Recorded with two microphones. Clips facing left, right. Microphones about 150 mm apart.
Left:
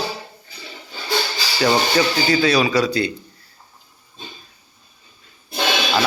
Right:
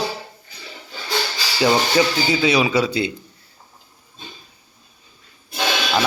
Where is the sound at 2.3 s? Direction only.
20° right (ahead or behind).